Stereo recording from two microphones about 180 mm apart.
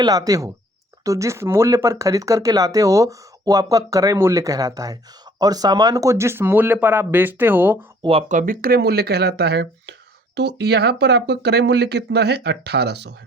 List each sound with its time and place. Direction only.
0.0 s speech: 20° right (ahead or behind)
8.3 s speech: 50° right (ahead or behind); by 13.1 s 70° right (ahead or behind)